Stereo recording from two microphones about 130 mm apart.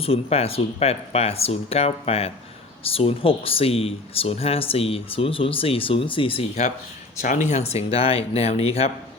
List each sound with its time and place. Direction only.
0.0 s speech: 50° left (ahead or behind)
7.2 s speech: 70° left (ahead or behind); by 8.9 s 50° left (ahead or behind)